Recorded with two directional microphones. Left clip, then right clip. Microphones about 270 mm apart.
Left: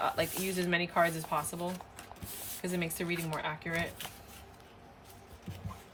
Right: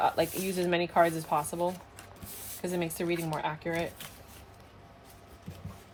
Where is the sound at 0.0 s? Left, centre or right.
Centre.